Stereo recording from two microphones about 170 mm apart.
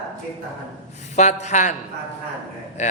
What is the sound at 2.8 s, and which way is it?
Speech, 45° left (ahead or behind).